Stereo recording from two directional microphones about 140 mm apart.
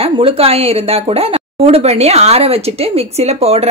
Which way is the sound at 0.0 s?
45° right (ahead or behind).